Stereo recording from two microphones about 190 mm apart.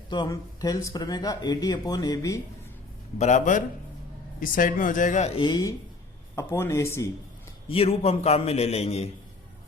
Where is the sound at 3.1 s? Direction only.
40° left (ahead or behind).